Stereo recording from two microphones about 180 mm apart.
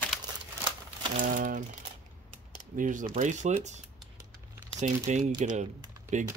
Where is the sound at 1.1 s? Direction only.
50° right (ahead or behind).